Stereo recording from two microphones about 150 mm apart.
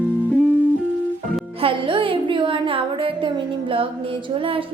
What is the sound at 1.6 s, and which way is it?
A woman's voice, 35° right (ahead or behind).